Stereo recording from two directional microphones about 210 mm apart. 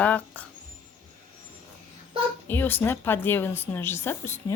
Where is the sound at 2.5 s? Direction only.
10° left (ahead or behind).